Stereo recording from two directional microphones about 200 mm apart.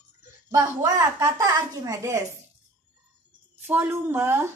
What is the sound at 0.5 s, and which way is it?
A woman's voice, 15° right (ahead or behind).